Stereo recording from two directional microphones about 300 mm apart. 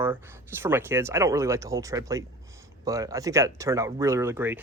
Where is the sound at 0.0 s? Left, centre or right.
Centre.